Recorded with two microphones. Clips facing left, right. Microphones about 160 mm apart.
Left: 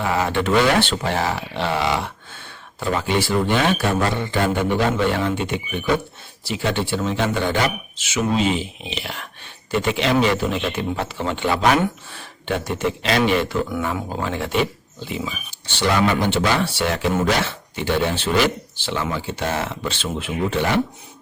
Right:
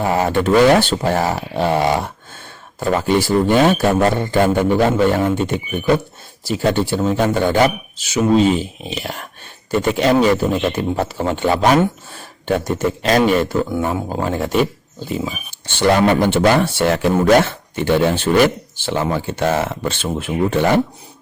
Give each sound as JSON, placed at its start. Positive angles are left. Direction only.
{"t": 0.0, "sound": "speech", "side_deg": -45}